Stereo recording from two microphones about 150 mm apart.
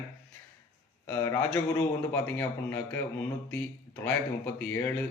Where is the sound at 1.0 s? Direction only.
15° left (ahead or behind).